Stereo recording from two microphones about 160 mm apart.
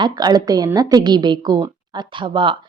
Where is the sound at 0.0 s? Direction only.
25° right (ahead or behind).